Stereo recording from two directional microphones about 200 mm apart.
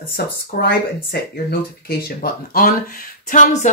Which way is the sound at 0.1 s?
50° left (ahead or behind).